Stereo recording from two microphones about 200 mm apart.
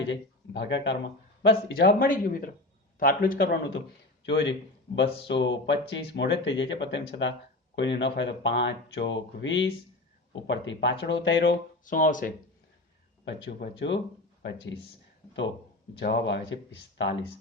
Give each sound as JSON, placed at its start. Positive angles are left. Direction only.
{"t": 0.1, "sound": "speech", "side_deg": 60}
{"t": 4.3, "sound": "speech", "side_deg": 65}
{"t": 11.9, "sound": "speech", "side_deg": 40}
{"t": 13.2, "sound": "speech", "side_deg": 60}
{"t": 16.0, "sound": "speech", "side_deg": 60}